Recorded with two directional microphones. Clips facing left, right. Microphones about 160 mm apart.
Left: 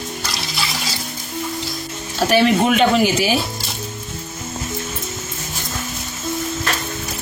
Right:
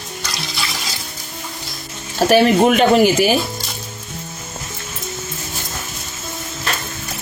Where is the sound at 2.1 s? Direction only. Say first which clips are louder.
Right 3 dB; 45° right (ahead or behind).